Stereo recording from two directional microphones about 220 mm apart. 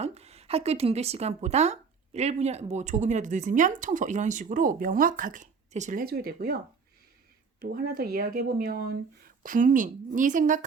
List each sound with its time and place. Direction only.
0.0 s speech: 30° right (ahead or behind); by 6.6 s 45° right (ahead or behind)
7.6 s speech: 40° right (ahead or behind)